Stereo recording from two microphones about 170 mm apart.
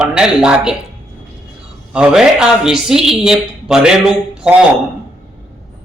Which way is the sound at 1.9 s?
5° right (ahead or behind).